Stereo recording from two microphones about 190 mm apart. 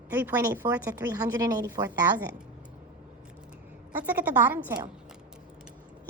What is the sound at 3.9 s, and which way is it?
Speech, 10° right (ahead or behind).